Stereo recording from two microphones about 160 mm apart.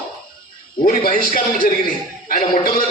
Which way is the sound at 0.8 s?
65° left (ahead or behind).